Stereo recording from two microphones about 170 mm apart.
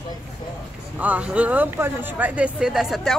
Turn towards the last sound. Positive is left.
turn(degrees=0)  # may be behind; listen again after turning